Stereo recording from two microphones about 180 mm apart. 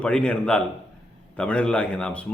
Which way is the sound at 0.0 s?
5° left (ahead or behind).